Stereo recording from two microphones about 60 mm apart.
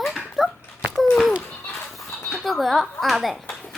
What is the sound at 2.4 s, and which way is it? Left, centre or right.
Speech, centre.